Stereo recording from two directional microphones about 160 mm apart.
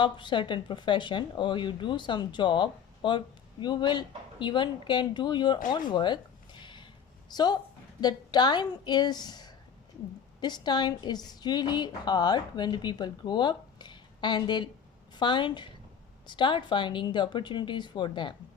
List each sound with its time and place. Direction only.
0.0 s speech: 30° left (ahead or behind)
5.7 s a sound: 30° left (ahead or behind)
7.3 s a woman's voice: 25° left (ahead or behind)